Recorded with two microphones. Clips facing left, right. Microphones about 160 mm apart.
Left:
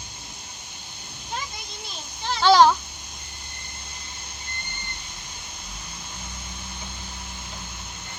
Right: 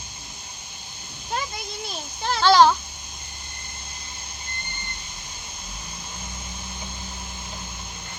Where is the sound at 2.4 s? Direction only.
15° left (ahead or behind).